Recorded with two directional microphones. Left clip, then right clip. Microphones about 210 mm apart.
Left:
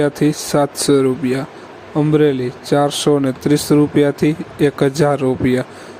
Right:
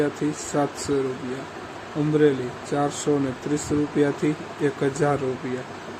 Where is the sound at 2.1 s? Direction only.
40° left (ahead or behind).